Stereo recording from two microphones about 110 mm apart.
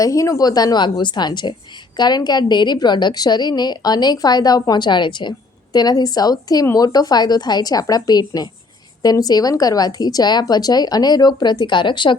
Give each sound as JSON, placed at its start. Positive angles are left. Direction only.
{"t": 0.0, "sound": "a woman's voice", "side_deg": 30}